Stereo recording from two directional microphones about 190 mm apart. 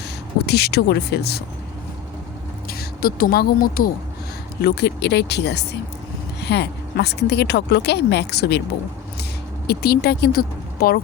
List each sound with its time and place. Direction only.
0.4 s a woman's voice: 60° left (ahead or behind)
2.6 s speech: 50° left (ahead or behind)
4.6 s a woman's voice: 60° left (ahead or behind)
9.6 s speech: 55° left (ahead or behind)